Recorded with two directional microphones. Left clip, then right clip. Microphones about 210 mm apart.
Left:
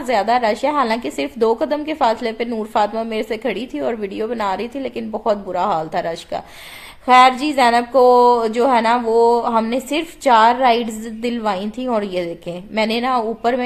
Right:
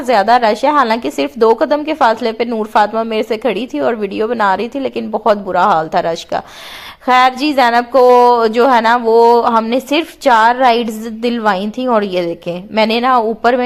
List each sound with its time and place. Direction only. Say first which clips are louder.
0.0 s a woman's voice: right 6 dB; 25° right (ahead or behind)